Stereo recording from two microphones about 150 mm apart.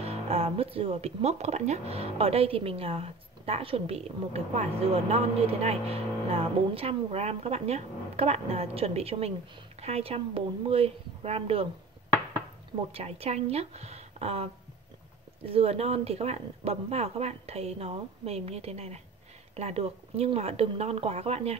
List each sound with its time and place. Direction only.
0.0 s speech: 40° right (ahead or behind)
12.9 s speech: 45° right (ahead or behind)
15.5 s speech: 40° right (ahead or behind)